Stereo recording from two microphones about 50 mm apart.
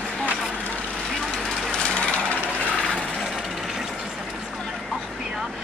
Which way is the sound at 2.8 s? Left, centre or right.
Centre.